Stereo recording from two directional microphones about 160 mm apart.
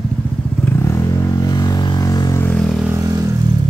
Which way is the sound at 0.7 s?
15° left (ahead or behind).